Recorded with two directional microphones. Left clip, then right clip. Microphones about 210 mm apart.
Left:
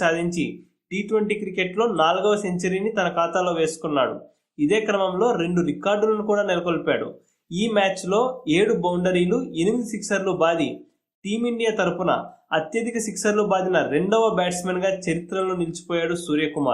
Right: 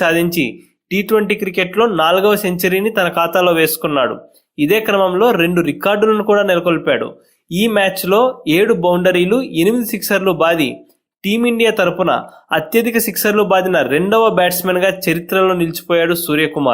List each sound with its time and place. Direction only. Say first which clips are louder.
0.0 s speech: right 8 dB; 35° right (ahead or behind)